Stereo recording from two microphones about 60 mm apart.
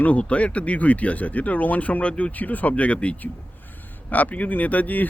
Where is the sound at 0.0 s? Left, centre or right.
Left.